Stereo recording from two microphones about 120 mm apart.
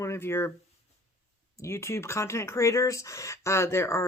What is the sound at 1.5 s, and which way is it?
Speech, 25° left (ahead or behind).